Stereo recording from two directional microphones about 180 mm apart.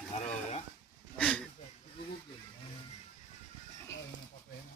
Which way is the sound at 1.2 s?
5° left (ahead or behind).